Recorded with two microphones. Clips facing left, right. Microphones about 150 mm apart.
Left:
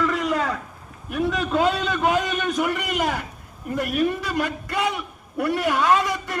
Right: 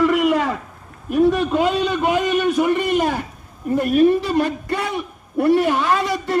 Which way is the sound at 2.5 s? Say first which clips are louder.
Right 6 dB; 25° right (ahead or behind).